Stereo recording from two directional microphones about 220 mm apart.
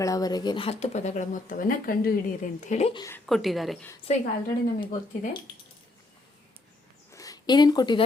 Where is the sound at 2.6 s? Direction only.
30° left (ahead or behind).